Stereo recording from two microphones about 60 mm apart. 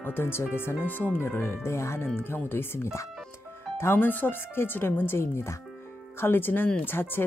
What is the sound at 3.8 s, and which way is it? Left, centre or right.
Speech, left.